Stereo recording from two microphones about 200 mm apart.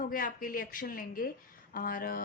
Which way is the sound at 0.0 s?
45° left (ahead or behind).